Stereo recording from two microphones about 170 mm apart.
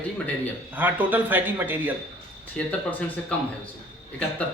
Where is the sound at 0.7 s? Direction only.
10° right (ahead or behind).